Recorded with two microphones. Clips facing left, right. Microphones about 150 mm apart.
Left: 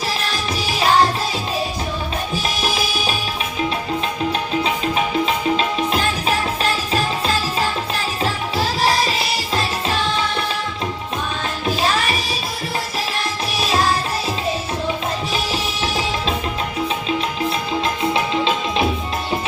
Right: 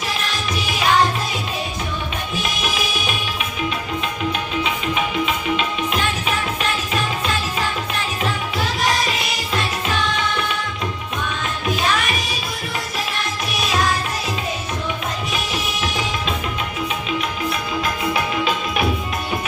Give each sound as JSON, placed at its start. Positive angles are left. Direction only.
{"t": 0.8, "sound": "music", "side_deg": 30}
{"t": 2.3, "sound": "music", "side_deg": 35}
{"t": 5.2, "sound": "music", "side_deg": 35}
{"t": 11.6, "sound": "music", "side_deg": 30}
{"t": 15.3, "sound": "music", "side_deg": 30}
{"t": 17.8, "sound": "music", "side_deg": 25}